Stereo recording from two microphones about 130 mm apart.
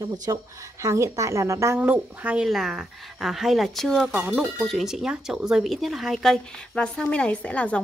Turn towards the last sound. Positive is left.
turn(degrees=10)  # may be behind; listen again after turning